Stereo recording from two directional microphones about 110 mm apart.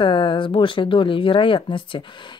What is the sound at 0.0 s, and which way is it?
Speech, 50° left (ahead or behind).